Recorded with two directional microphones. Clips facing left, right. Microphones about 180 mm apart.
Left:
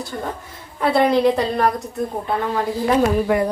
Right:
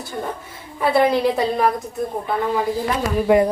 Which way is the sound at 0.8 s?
Centre (ahead or behind).